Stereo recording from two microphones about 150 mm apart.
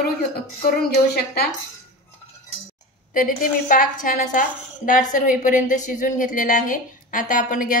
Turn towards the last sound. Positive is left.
turn(degrees=65)  # may be behind; listen again after turning